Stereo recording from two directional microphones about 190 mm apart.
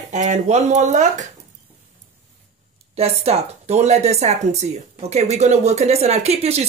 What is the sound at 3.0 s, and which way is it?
A woman's voice, 35° right (ahead or behind).